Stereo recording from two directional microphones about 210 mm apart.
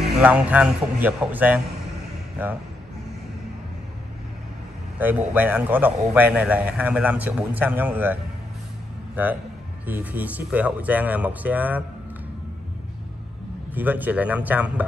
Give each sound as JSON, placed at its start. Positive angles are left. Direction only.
{"t": 0.2, "sound": "a man's voice", "side_deg": -5}
{"t": 4.9, "sound": "a man's voice", "side_deg": -10}
{"t": 13.7, "sound": "a man's voice", "side_deg": -10}